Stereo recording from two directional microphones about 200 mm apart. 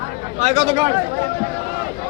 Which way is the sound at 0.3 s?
35° right (ahead or behind).